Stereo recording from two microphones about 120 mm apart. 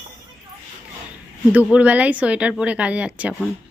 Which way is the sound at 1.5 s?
10° right (ahead or behind).